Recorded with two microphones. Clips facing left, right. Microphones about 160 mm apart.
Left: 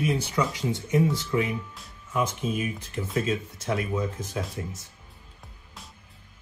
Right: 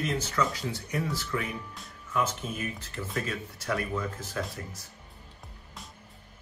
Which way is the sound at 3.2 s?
25° left (ahead or behind).